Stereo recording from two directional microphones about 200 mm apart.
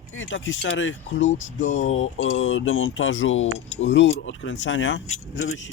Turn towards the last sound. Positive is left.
turn(degrees=80)